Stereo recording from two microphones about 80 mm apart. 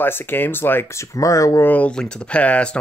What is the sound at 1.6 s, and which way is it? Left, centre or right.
Speech, centre.